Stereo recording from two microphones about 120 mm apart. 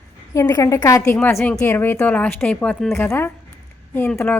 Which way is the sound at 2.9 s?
20° left (ahead or behind).